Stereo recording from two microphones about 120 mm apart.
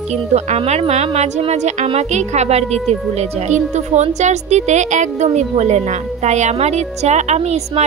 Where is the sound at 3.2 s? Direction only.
75° right (ahead or behind).